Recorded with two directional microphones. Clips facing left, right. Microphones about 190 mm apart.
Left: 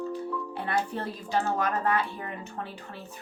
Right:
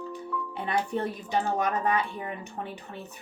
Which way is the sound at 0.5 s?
15° right (ahead or behind).